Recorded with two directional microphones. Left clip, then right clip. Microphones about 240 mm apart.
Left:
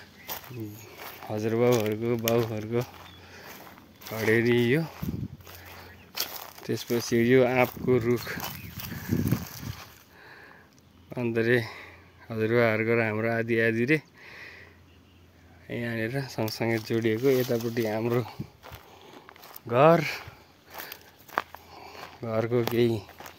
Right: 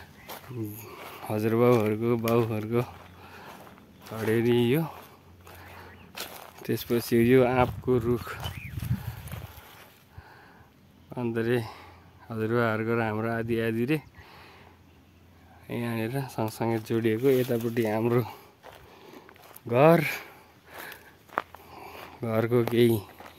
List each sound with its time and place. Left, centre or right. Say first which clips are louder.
0.3 s a sound: left 3 dB; left
1.1 s speech: right 2 dB; right
4.3 s speech: left 1 dB; centre
5.7 s crushing: even; left
6.6 s speech: right 1 dB; centre
8.4 s a sound: left 2 dB; left
11.1 s speech: left 3 dB; centre
15.6 s speech: left 1 dB; centre
19.7 s speech: even; right
20.7 s biting: even; left
21.6 s a sound: right 1 dB; right
22.2 s speech: right 1 dB; right